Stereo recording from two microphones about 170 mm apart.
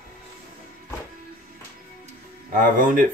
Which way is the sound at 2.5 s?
55° right (ahead or behind).